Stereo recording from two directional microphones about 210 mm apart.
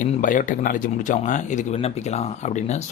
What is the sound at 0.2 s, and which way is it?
Speech, 35° left (ahead or behind).